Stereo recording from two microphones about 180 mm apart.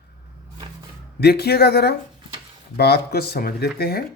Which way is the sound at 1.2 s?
65° left (ahead or behind).